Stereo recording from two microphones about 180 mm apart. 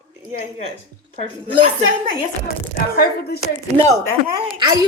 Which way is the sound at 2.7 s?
55° left (ahead or behind).